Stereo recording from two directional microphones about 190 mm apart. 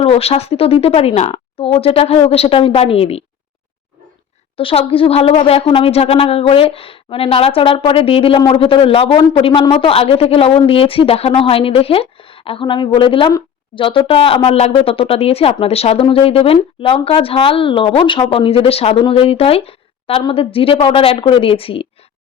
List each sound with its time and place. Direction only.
0.0 s a woman's voice: 30° left (ahead or behind)
4.5 s a woman's voice: 30° left (ahead or behind)